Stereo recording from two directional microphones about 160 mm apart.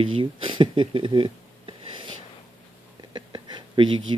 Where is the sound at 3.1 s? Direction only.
30° right (ahead or behind).